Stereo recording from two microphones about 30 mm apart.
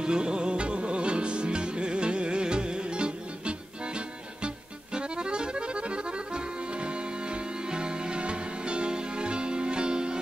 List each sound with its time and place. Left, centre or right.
0.0 s music: right
4.9 s accordion: right